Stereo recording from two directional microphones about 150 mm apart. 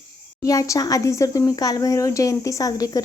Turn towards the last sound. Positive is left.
turn(degrees=25)  # may be behind; listen again after turning